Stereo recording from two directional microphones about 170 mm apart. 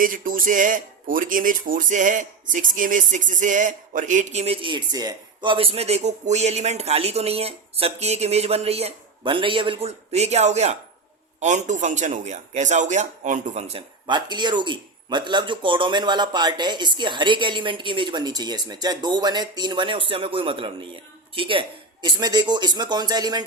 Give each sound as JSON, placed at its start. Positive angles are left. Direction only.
{"t": 0.0, "sound": "a man's voice", "side_deg": -55}
{"t": 14.1, "sound": "speech", "side_deg": -25}